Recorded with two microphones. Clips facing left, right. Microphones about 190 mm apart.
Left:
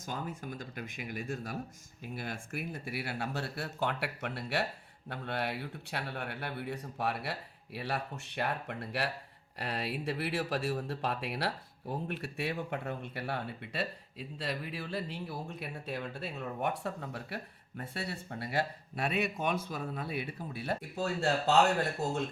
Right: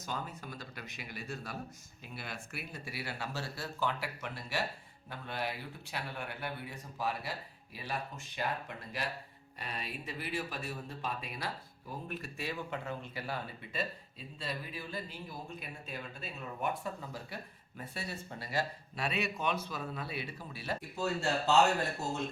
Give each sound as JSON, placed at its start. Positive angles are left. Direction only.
{"t": 0.0, "sound": "speech", "side_deg": 50}